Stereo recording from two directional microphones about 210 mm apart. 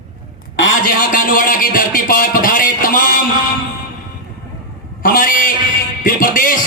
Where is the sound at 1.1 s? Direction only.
40° left (ahead or behind).